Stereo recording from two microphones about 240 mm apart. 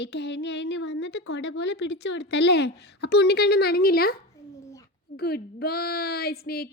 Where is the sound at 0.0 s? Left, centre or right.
Left.